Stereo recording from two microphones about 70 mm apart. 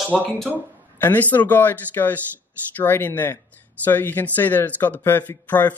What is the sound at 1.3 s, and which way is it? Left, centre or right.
Speech, left.